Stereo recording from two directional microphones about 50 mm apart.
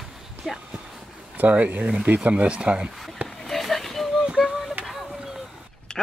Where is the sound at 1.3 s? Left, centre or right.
Right.